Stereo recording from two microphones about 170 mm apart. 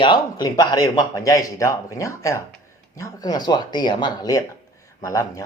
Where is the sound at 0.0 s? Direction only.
25° left (ahead or behind).